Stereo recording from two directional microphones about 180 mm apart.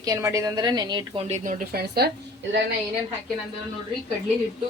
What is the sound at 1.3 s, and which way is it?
Speech, 45° right (ahead or behind).